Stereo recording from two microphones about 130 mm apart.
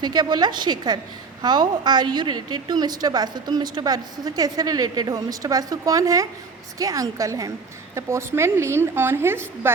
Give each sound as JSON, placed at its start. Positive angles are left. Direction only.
{"t": 0.0, "sound": "a woman's voice", "side_deg": -30}